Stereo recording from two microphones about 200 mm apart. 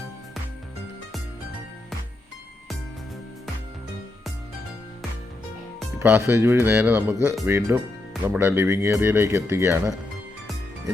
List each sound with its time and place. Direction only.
6.0 s speech: 10° right (ahead or behind)